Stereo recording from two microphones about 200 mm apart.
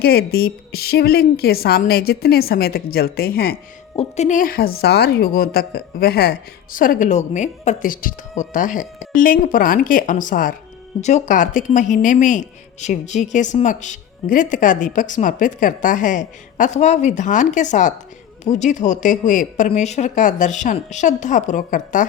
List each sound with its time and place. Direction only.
0.0 s a woman's voice: 50° left (ahead or behind)
3.9 s a woman's voice: 35° left (ahead or behind)